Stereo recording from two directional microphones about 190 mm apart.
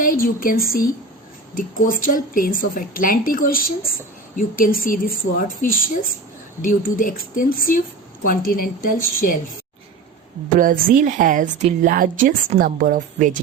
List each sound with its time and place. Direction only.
0.0 s a woman's voice: 45° left (ahead or behind)
10.6 s a woman's voice: 45° right (ahead or behind)